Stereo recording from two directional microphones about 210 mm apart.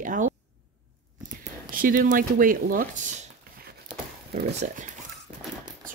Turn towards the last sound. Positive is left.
turn(degrees=-35)  # may be behind; listen again after turning